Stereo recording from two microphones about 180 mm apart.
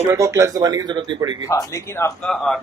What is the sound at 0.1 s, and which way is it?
Speech, 15° right (ahead or behind).